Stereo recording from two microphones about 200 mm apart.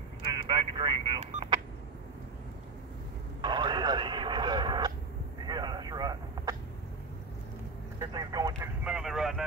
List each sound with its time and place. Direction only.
0.3 s telephone dialing: 25° right (ahead or behind)
3.3 s radio: 25° right (ahead or behind)
5.5 s a sound: 20° right (ahead or behind)
8.0 s vehicle: 20° right (ahead or behind)
8.8 s vehicle: 5° right (ahead or behind)